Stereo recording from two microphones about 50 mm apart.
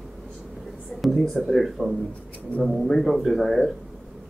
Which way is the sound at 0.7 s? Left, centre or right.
Centre.